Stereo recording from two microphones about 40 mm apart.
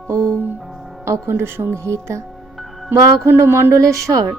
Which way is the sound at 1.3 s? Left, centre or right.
Right.